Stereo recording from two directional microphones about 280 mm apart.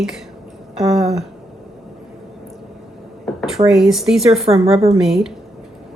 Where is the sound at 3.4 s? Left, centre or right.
Centre.